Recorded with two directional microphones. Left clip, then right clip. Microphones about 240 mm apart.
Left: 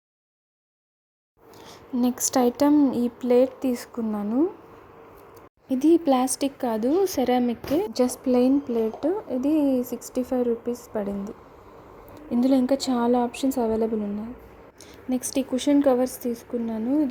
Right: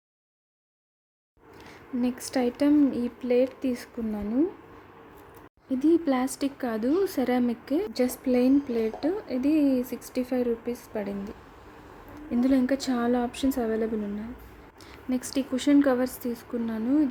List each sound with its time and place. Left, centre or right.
2.0 s speech: centre
5.6 s speech: centre
15.1 s speech: centre